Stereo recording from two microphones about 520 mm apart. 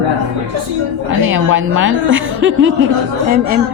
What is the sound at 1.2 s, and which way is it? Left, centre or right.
A woman's voice, right.